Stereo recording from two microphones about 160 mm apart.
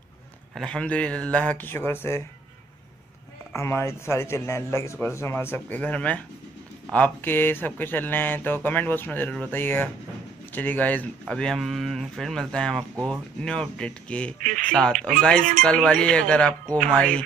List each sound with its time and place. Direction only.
0.6 s speech: 5° left (ahead or behind)
3.5 s speech: 15° left (ahead or behind)